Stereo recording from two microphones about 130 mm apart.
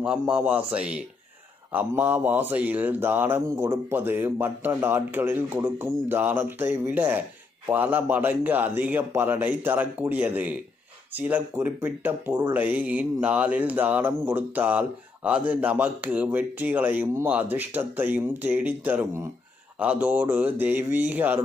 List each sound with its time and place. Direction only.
0.0 s speech: 5° right (ahead or behind)